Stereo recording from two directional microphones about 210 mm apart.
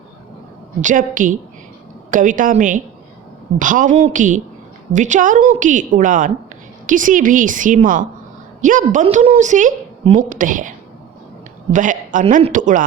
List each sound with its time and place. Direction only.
0.8 s a woman's voice: 40° right (ahead or behind)